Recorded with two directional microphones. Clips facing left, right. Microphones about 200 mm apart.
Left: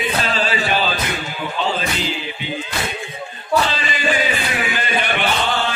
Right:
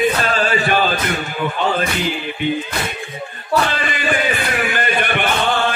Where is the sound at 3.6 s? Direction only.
55° right (ahead or behind).